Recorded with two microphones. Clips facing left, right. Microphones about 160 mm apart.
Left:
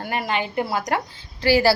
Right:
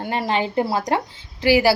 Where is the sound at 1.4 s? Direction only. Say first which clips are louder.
Right 1 dB; 15° right (ahead or behind).